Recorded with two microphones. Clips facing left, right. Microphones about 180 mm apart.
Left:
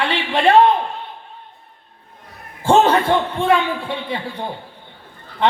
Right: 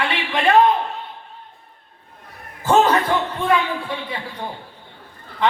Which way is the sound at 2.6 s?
30° left (ahead or behind).